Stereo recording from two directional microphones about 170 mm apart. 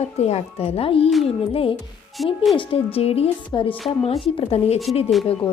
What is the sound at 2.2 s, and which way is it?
Speech, centre (ahead or behind).